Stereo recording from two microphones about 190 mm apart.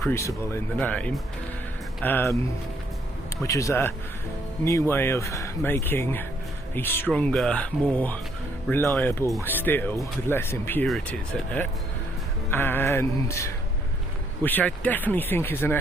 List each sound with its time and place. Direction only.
0.1 s speech: 15° left (ahead or behind)
3.4 s speech: 15° left (ahead or behind)